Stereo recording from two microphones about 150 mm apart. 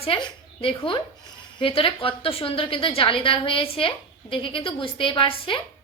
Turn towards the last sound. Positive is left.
turn(degrees=35)  # may be behind; listen again after turning